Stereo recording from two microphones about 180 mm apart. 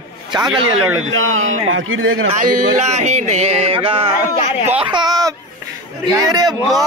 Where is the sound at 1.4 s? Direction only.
90° right.